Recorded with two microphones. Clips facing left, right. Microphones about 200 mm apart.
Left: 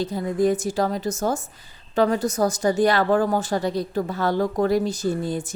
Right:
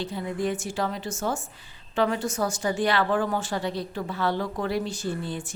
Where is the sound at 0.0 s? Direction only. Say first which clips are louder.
Left 7 dB; 40° left (ahead or behind).